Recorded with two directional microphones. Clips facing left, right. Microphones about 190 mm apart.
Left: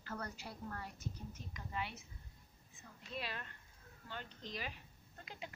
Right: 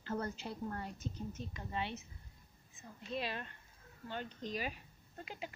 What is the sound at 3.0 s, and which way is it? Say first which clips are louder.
A woman's voice: right 5 dB; 25° right (ahead or behind).